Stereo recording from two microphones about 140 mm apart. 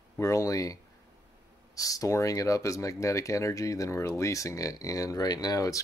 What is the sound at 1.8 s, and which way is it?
Speech, 25° left (ahead or behind).